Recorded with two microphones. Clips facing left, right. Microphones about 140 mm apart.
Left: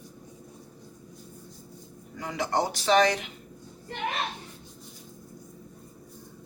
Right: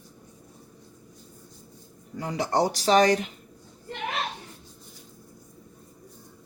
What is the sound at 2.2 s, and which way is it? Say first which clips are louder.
Speech: right 3 dB; 35° right (ahead or behind).